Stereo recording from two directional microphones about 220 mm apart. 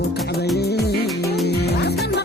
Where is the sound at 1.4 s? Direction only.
50° left (ahead or behind).